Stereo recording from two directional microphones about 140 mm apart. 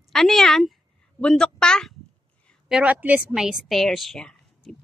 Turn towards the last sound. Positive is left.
turn(degrees=5)  # may be behind; listen again after turning